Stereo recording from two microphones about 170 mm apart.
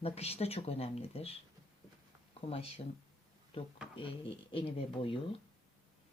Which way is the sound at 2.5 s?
35° left (ahead or behind).